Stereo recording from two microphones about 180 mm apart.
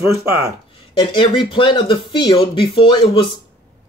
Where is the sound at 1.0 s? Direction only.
25° left (ahead or behind).